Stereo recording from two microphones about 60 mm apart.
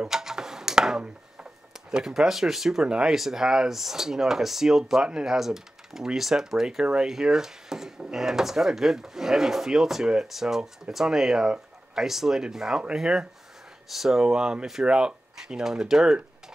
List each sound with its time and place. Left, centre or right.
0.0 s speech: centre